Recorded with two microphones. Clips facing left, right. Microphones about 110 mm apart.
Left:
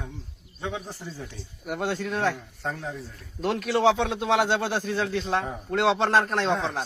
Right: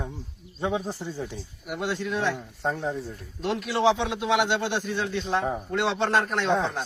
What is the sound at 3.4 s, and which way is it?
Speech, 45° left (ahead or behind).